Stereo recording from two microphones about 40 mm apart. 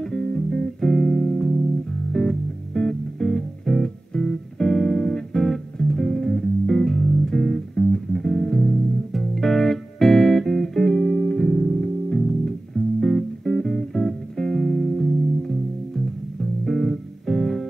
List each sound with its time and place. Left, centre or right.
0.0 s music: centre